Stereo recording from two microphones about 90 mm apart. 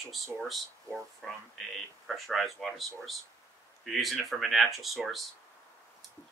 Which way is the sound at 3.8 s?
Centre (ahead or behind).